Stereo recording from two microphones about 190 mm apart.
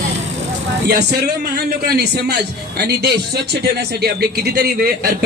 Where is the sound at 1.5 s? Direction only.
55° right (ahead or behind).